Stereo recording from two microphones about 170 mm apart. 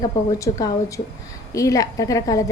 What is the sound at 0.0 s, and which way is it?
A woman's voice, 20° left (ahead or behind).